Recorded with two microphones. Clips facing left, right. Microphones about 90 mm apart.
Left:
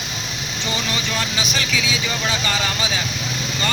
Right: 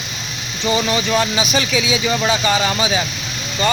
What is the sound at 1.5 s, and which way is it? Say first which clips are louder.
Speech: right 5 dB; 20° right (ahead or behind).